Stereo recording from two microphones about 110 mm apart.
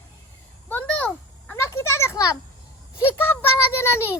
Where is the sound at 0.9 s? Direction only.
15° left (ahead or behind).